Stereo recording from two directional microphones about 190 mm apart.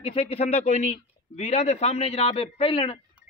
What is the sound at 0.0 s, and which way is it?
A man's voice, 30° left (ahead or behind).